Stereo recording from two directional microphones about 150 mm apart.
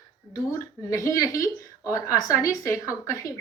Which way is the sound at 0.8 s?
20° left (ahead or behind).